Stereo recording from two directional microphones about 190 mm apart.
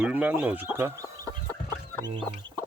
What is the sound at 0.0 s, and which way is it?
Speech, 10° right (ahead or behind).